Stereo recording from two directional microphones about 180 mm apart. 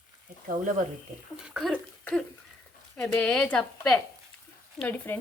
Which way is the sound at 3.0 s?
5° left (ahead or behind).